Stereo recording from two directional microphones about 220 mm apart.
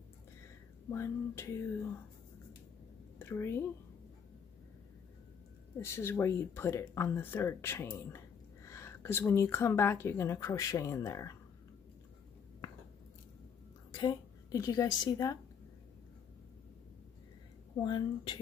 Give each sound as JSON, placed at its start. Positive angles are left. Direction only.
{"t": 0.8, "sound": "speech", "side_deg": 10}
{"t": 3.2, "sound": "speech", "side_deg": 10}
{"t": 5.8, "sound": "speech", "side_deg": 10}
{"t": 13.9, "sound": "a woman's voice", "side_deg": 20}
{"t": 17.8, "sound": "speech", "side_deg": 20}